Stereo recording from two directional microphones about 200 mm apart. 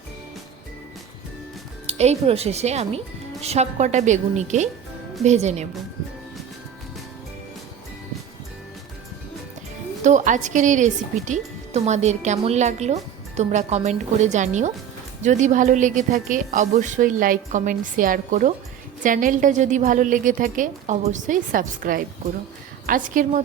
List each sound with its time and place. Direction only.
1.9 s speech: 30° right (ahead or behind)
10.0 s speech: 35° right (ahead or behind)